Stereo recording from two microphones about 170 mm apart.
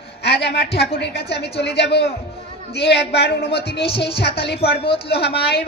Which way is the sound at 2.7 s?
80° left.